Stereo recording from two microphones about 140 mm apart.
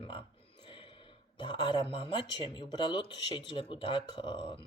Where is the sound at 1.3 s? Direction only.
35° left (ahead or behind).